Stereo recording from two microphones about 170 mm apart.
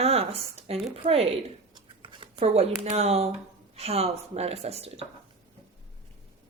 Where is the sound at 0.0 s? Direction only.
35° right (ahead or behind).